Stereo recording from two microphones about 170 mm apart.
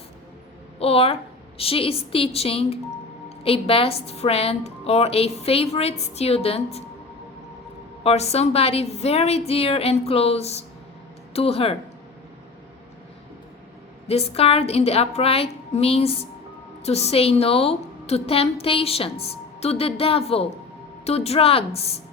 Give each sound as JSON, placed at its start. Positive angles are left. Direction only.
{"t": 0.8, "sound": "a woman's voice", "side_deg": 35}
{"t": 8.0, "sound": "a woman's voice", "side_deg": 40}
{"t": 14.1, "sound": "a woman's voice", "side_deg": 35}